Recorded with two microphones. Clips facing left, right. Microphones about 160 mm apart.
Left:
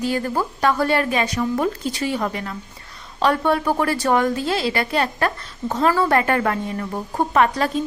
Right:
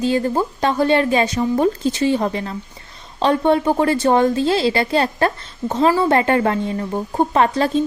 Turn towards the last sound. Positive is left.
turn(degrees=-30)  # may be behind; listen again after turning